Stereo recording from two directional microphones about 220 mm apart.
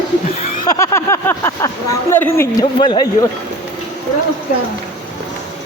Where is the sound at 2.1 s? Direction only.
10° left (ahead or behind).